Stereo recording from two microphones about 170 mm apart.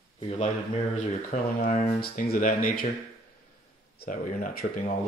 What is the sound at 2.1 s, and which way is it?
Speech, 60° left (ahead or behind).